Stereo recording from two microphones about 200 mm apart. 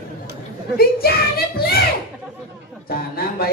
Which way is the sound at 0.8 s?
50° left (ahead or behind).